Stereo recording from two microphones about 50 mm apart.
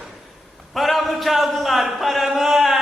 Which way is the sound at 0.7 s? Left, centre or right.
Centre.